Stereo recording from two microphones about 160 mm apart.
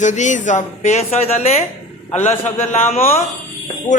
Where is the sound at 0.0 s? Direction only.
50° left (ahead or behind).